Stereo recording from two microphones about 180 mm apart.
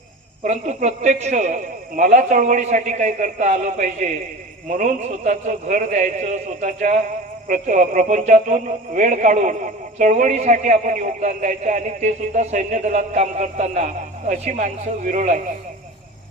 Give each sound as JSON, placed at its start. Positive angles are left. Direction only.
{"t": 0.4, "sound": "a man's voice", "side_deg": -40}